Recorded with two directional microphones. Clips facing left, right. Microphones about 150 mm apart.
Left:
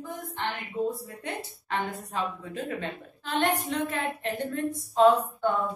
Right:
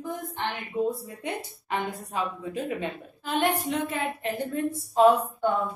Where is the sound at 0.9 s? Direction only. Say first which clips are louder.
Right 2 dB; 15° right (ahead or behind).